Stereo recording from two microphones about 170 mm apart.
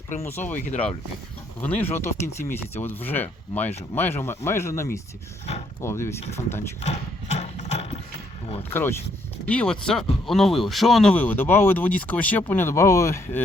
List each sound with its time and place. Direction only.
0.2 s speech: 10° left (ahead or behind)
1.6 s speech: 10° left (ahead or behind)
6.8 s horse: 40° left (ahead or behind)
8.7 s speech: 10° left (ahead or behind)